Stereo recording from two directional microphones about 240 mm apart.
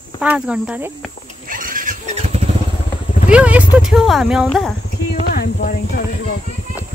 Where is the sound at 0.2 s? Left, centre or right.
Centre.